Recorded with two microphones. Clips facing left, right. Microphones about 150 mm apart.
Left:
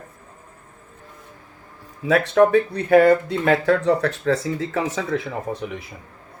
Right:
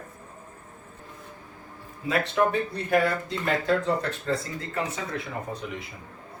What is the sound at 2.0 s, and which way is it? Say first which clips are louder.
Speech: left 8 dB; 80° left.